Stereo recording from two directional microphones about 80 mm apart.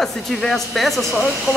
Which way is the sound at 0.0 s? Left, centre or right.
Centre.